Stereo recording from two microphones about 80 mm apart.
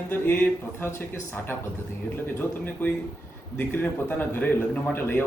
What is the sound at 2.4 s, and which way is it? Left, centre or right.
Speech, left.